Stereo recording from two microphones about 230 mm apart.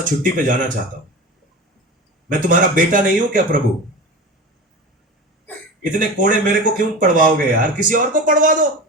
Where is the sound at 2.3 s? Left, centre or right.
Right.